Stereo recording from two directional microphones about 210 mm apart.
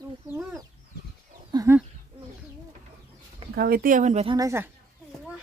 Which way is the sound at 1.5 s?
15° right (ahead or behind).